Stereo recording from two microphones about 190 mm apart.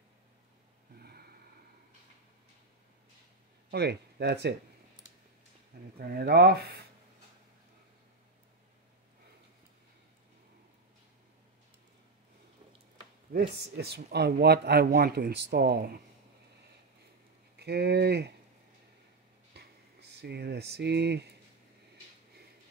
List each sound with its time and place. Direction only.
0.9 s snort: 55° right (ahead or behind)
3.7 s a man's voice: 60° right (ahead or behind)
5.9 s a man's voice: 55° right (ahead or behind)
13.3 s a man's voice: 60° right (ahead or behind)
17.6 s a man's voice: 60° right (ahead or behind)
19.5 s a sound: 60° right (ahead or behind)